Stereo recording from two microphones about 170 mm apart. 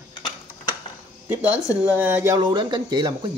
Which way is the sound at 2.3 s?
25° right (ahead or behind).